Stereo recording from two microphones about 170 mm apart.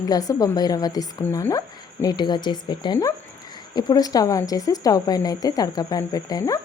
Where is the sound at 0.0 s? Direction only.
20° left (ahead or behind).